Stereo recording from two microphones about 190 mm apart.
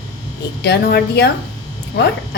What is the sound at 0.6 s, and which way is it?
Speech, 60° left (ahead or behind).